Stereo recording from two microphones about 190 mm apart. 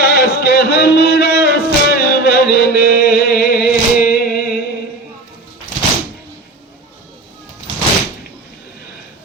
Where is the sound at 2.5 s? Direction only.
55° left (ahead or behind).